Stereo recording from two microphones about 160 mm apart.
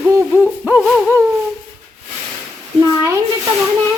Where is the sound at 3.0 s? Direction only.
15° right (ahead or behind).